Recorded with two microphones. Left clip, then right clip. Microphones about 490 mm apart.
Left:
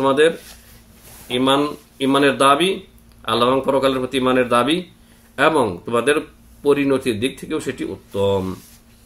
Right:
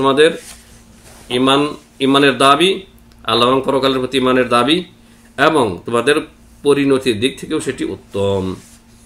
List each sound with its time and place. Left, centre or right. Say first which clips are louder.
0.0 s speech: right 3 dB; left